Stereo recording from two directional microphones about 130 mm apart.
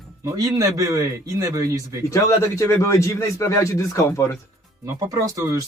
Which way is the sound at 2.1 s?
25° left (ahead or behind).